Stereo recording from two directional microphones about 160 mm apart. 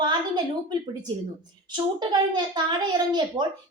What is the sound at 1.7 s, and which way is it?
A child's voice, 25° right (ahead or behind).